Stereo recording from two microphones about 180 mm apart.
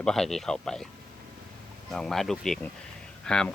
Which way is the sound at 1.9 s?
Centre (ahead or behind).